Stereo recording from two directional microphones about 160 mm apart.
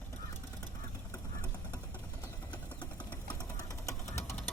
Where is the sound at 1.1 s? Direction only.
20° left (ahead or behind).